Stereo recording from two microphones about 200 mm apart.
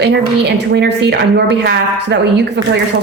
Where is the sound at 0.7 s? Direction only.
60° right (ahead or behind).